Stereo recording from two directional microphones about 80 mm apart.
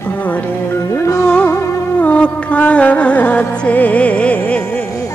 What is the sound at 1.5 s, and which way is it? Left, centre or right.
Music, left.